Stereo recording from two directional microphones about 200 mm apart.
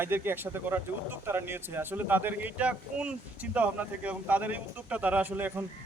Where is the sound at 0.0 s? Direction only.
10° right (ahead or behind).